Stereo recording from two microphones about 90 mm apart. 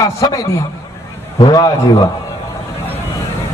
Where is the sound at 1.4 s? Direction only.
50° left (ahead or behind).